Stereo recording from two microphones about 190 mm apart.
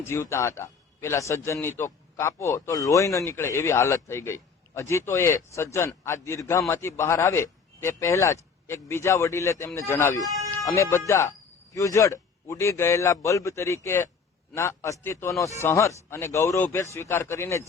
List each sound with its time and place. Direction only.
0.0 s speech: 10° left (ahead or behind)